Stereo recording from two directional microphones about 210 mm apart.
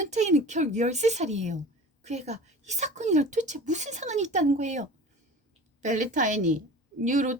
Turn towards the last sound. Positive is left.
turn(degrees=-35)  # may be behind; listen again after turning